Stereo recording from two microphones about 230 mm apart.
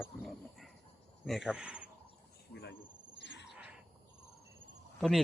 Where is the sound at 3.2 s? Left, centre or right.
Left.